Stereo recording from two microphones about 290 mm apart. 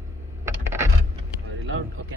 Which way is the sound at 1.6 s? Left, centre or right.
Right.